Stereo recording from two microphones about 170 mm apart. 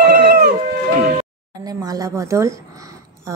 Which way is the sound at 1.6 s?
20° right (ahead or behind).